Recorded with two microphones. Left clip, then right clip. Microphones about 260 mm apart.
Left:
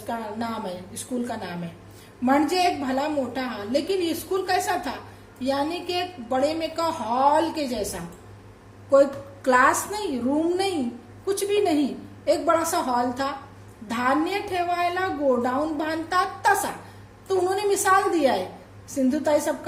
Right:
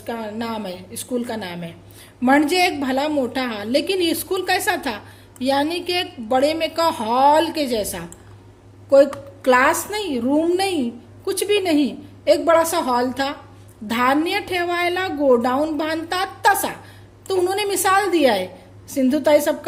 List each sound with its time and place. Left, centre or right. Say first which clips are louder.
0.1 s a woman's voice: right 3 dB; right